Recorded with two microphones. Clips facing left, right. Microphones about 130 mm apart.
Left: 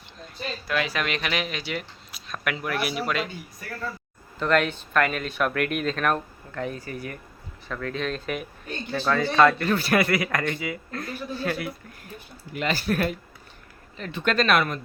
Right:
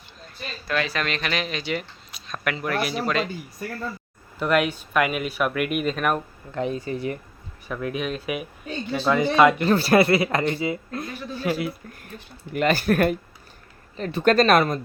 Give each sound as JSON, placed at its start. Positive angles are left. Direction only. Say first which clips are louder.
{"t": 0.7, "sound": "speech", "louder": "right 1 dB", "side_deg": 10}
{"t": 4.4, "sound": "speech", "louder": "right 1 dB", "side_deg": -10}
{"t": 6.5, "sound": "a man's voice", "louder": "right 5 dB", "side_deg": -20}
{"t": 9.6, "sound": "a man's voice", "louder": "right 5 dB", "side_deg": -30}
{"t": 12.5, "sound": "speech", "louder": "right 5 dB", "side_deg": -50}
{"t": 13.9, "sound": "speech", "louder": "right 6 dB", "side_deg": -40}